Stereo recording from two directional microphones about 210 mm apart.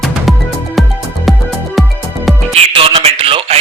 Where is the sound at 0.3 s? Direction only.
Centre (ahead or behind).